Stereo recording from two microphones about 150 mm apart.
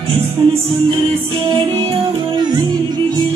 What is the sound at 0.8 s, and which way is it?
Music, 35° right (ahead or behind).